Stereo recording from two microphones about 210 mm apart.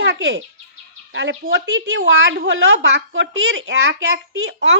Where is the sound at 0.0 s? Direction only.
55° right (ahead or behind).